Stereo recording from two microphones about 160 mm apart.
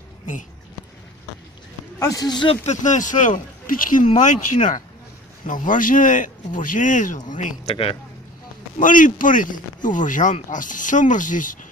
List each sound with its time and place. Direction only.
2.0 s speech: 20° left (ahead or behind); by 7.7 s 50° left (ahead or behind)
7.7 s speech: 35° left (ahead or behind)
8.7 s speech: 55° left (ahead or behind)